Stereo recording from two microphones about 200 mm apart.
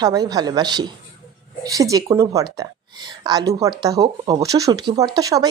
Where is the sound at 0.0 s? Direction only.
20° right (ahead or behind).